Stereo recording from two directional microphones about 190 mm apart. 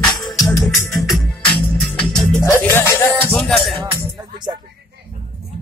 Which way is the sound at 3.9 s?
25° right (ahead or behind).